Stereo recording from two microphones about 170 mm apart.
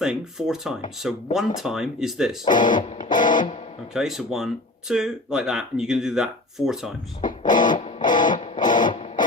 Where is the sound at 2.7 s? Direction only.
40° left (ahead or behind).